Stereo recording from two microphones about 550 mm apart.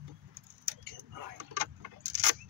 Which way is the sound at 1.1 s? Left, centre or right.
Right.